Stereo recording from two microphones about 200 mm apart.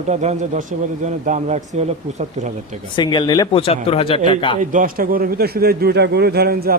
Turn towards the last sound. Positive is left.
turn(degrees=-50)  # may be behind; listen again after turning